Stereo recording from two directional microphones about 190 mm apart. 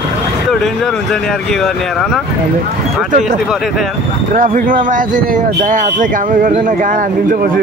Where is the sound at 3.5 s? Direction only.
Centre (ahead or behind).